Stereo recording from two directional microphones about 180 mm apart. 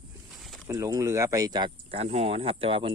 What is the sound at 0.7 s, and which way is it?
Speech, 20° right (ahead or behind).